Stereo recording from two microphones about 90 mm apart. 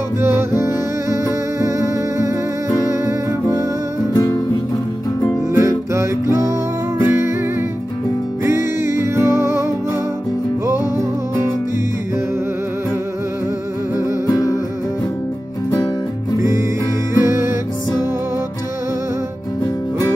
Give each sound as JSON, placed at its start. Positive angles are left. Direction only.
{"t": 0.4, "sound": "music", "side_deg": -30}
{"t": 4.1, "sound": "music", "side_deg": 40}
{"t": 5.6, "sound": "music", "side_deg": -30}
{"t": 8.5, "sound": "music", "side_deg": -30}
{"t": 14.2, "sound": "music", "side_deg": 40}
{"t": 17.2, "sound": "music", "side_deg": -30}